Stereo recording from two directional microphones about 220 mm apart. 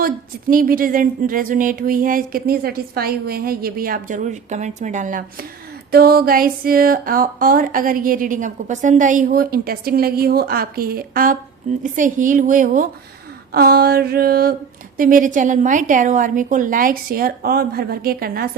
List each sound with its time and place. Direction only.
0.0 s speech: 40° right (ahead or behind)
13.5 s a sound: 45° right (ahead or behind)
14.9 s speech: 40° right (ahead or behind)